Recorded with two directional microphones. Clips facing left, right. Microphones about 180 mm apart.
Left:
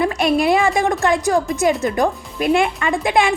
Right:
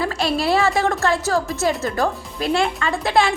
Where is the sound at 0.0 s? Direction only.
20° left (ahead or behind).